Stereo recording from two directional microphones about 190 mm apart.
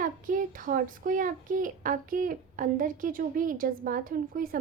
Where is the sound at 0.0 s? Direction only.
45° right (ahead or behind).